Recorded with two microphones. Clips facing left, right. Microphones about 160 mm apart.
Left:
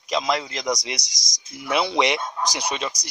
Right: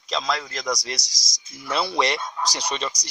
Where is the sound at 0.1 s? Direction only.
15° left (ahead or behind).